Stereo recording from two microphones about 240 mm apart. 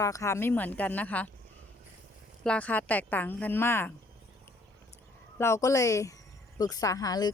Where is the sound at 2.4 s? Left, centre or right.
Centre.